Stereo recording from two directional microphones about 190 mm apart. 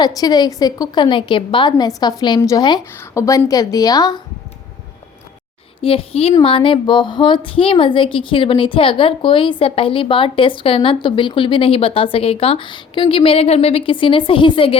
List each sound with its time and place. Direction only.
0.0 s a woman's voice: 20° left (ahead or behind)
5.8 s a woman's voice: 30° left (ahead or behind)